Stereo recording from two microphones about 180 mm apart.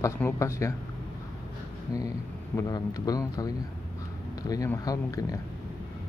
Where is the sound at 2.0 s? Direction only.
20° left (ahead or behind).